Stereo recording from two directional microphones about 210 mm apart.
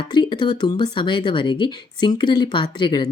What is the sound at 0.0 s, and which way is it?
Speech, 20° left (ahead or behind).